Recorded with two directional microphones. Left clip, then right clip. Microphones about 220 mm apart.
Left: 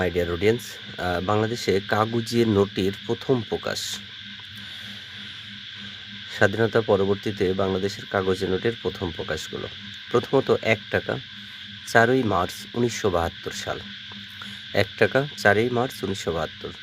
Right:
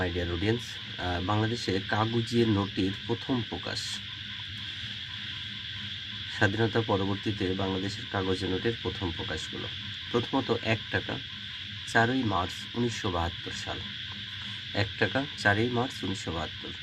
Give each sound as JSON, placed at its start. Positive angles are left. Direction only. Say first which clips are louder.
{"t": 0.0, "sound": "speech", "louder": "left 8 dB", "side_deg": 50}
{"t": 6.4, "sound": "speech", "louder": "left 7 dB", "side_deg": 45}